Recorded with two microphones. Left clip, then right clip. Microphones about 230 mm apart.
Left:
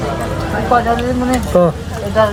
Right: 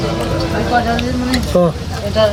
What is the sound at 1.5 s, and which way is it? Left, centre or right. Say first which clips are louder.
Speech: left 2 dB; centre.